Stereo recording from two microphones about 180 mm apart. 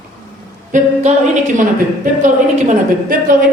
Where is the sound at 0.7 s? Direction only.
45° right (ahead or behind).